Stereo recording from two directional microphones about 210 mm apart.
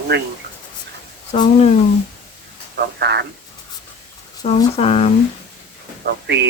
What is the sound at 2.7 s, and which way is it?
Speech, 50° right (ahead or behind).